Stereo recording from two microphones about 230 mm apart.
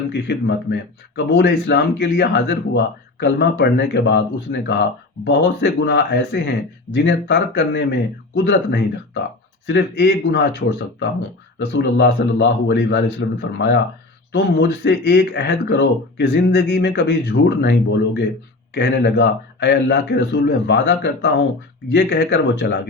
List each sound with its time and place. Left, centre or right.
0.1 s speech: left
11.7 s speech: left